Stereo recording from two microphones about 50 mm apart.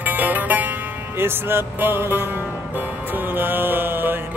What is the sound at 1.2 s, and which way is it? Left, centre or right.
Music, right.